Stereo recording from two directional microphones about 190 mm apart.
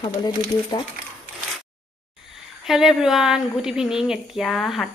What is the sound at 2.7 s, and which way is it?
Speech, centre (ahead or behind).